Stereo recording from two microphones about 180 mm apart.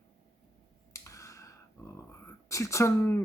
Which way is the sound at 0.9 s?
15° left (ahead or behind).